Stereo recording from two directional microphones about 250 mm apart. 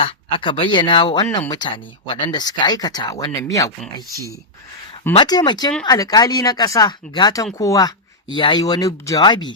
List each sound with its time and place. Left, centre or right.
0.0 s speech: left
5.1 s speech: centre